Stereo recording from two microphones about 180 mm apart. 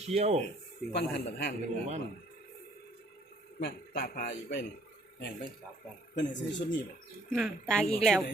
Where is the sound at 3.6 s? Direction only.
60° left (ahead or behind).